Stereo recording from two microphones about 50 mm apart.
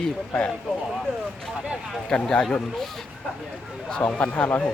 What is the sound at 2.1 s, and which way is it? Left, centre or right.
Speech, centre.